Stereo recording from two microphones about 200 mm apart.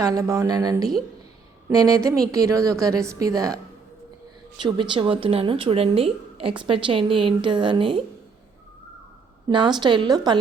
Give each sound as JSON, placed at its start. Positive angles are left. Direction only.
{"t": 0.0, "sound": "a woman's voice", "side_deg": -15}
{"t": 4.6, "sound": "a woman's voice", "side_deg": -25}
{"t": 9.5, "sound": "a woman's voice", "side_deg": -20}